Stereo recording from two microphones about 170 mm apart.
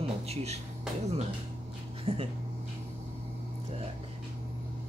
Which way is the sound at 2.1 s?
35° right (ahead or behind).